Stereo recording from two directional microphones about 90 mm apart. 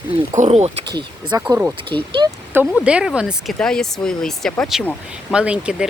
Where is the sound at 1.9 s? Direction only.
65° right (ahead or behind).